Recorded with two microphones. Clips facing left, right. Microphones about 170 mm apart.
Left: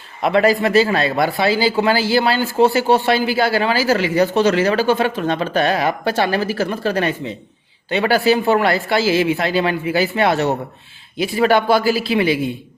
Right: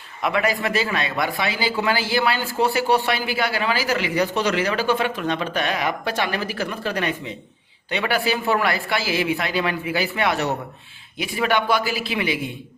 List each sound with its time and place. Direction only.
0.2 s speech: 30° left (ahead or behind)